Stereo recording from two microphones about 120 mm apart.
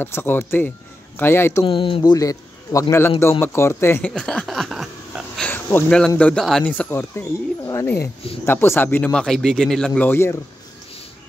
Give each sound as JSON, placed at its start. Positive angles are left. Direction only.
{"t": 0.0, "sound": "speech", "side_deg": 20}
{"t": 1.6, "sound": "speech", "side_deg": 45}
{"t": 2.1, "sound": "a man's voice", "side_deg": 30}
{"t": 4.0, "sound": "a sound", "side_deg": 5}
{"t": 5.5, "sound": "a sound", "side_deg": 15}
{"t": 5.9, "sound": "speech", "side_deg": 10}